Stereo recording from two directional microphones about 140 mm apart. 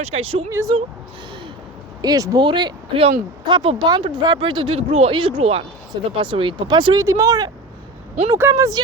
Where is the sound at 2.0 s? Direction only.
25° right (ahead or behind).